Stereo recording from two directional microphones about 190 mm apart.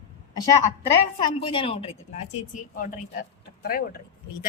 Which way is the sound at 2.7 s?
45° left (ahead or behind).